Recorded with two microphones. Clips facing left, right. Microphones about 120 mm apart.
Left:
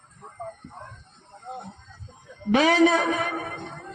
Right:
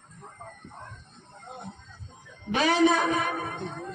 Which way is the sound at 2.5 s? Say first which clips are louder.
Left 3 dB; 90° left.